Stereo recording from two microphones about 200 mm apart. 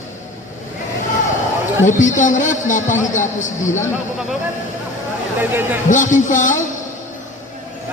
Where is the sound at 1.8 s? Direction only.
40° left (ahead or behind).